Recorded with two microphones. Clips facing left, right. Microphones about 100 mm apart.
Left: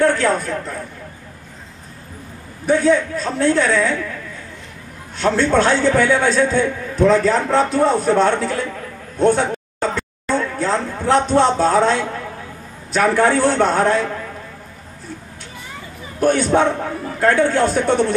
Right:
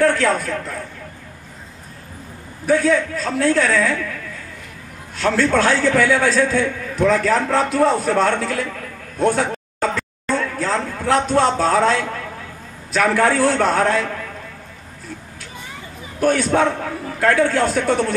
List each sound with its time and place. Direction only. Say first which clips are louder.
0.0 s a man's voice: even; 35° left (ahead or behind)
2.6 s a man's voice: left 1 dB; 35° left (ahead or behind)
9.9 s a sound: left 1 dB; 30° left (ahead or behind)
11.3 s a man's voice: left 2 dB; 30° left (ahead or behind)
16.2 s a man's voice: left 1 dB; 35° left (ahead or behind)